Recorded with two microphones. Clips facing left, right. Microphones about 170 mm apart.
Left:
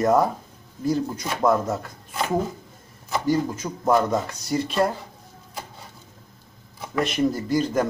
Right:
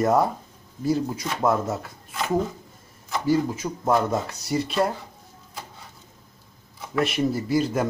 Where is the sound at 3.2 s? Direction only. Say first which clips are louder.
Right 1 dB; 5° right (ahead or behind).